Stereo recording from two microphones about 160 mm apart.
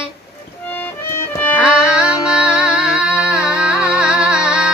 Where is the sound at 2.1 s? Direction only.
20° left (ahead or behind).